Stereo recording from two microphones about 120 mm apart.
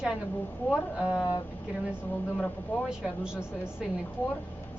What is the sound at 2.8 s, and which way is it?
Speech, 5° right (ahead or behind).